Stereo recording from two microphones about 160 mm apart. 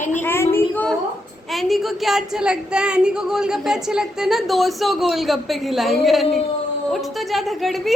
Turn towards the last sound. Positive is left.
turn(degrees=0)  # may be behind; listen again after turning